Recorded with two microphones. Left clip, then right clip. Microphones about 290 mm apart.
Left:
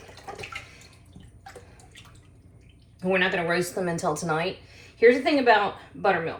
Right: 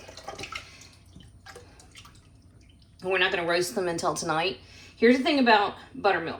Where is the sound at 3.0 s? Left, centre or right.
Right.